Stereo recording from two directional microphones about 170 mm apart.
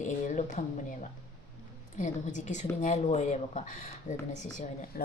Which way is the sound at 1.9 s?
45° left (ahead or behind).